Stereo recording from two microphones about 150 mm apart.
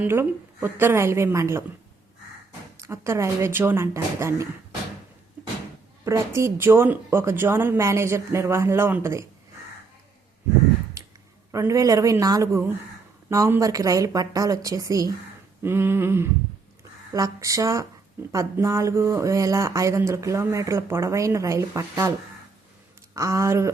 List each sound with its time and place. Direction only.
0.0 s speech: 15° right (ahead or behind)
2.7 s speech: 20° right (ahead or behind)
6.1 s speech: 20° right (ahead or behind)
11.0 s a sound: 20° right (ahead or behind)
11.5 s speech: 20° right (ahead or behind)
23.1 s speech: 20° right (ahead or behind)